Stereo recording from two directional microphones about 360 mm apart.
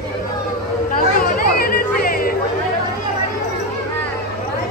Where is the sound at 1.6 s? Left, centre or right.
Left.